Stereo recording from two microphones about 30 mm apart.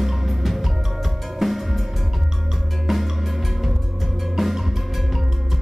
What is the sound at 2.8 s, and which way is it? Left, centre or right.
Music, centre.